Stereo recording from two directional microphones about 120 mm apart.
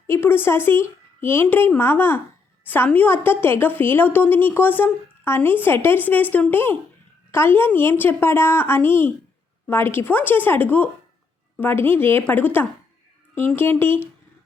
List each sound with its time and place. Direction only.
0.1 s a woman's voice: 20° left (ahead or behind)